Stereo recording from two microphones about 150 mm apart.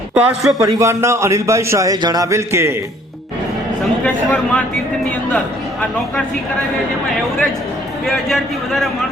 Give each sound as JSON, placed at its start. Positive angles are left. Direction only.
{"t": 0.1, "sound": "speech", "side_deg": -5}
{"t": 0.6, "sound": "a man's voice", "side_deg": -20}
{"t": 4.0, "sound": "speech", "side_deg": 10}
{"t": 8.0, "sound": "a man's voice", "side_deg": 0}